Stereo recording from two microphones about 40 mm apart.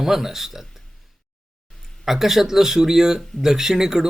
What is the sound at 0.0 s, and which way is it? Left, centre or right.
Speech, centre.